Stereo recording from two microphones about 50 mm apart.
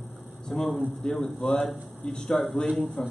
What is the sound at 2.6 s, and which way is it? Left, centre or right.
Speech, left.